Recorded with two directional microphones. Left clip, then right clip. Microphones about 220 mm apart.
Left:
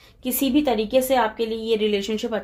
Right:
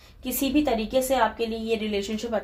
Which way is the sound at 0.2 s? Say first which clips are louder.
Left 3 dB; 45° left (ahead or behind).